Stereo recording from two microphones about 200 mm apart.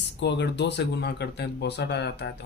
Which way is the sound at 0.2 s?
60° left (ahead or behind).